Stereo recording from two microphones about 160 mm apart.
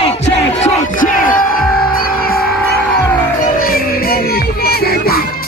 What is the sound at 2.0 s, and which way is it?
Music, 70° left (ahead or behind).